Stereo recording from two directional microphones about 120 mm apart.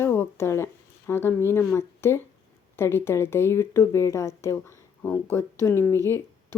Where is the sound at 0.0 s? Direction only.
20° left (ahead or behind).